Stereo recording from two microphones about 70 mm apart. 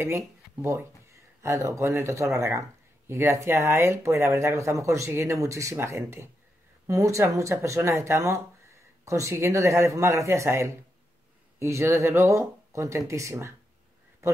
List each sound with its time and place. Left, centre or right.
0.6 s speech: right